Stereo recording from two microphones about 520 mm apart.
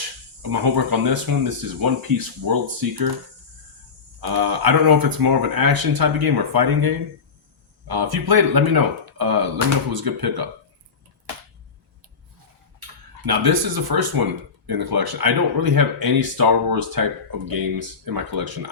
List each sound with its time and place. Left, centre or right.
0.5 s speech: right
4.2 s speech: right
13.2 s speech: right